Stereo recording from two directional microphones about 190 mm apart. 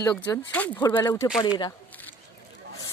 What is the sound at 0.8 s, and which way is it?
Speech, 20° left (ahead or behind).